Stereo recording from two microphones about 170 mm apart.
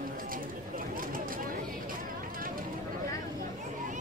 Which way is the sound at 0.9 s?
55° right (ahead or behind).